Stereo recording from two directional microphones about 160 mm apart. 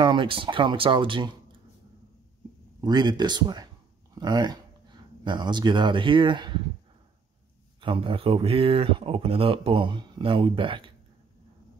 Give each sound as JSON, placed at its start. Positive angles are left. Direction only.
{"t": 0.0, "sound": "speech", "side_deg": -30}
{"t": 2.8, "sound": "speech", "side_deg": -25}
{"t": 7.8, "sound": "speech", "side_deg": -35}